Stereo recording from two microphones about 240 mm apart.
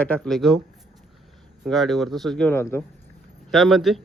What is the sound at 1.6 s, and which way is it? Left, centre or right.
Speech, centre.